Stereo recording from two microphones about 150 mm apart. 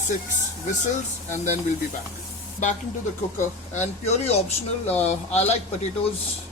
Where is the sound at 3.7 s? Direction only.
50° left (ahead or behind).